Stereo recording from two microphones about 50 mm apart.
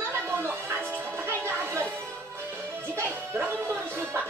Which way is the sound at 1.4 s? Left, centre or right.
Right.